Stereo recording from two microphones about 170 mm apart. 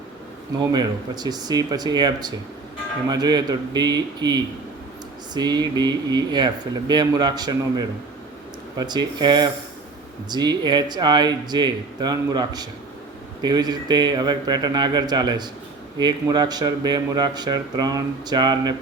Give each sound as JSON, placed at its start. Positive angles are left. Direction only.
{"t": 0.7, "sound": "speech", "side_deg": -25}